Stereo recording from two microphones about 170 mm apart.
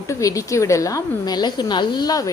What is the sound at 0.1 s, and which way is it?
A woman's voice, 20° left (ahead or behind).